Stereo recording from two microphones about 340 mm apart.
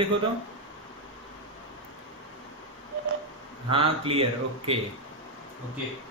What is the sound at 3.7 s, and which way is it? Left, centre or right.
A man's voice, centre.